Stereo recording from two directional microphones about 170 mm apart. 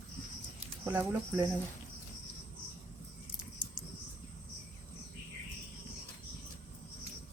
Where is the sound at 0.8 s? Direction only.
10° right (ahead or behind).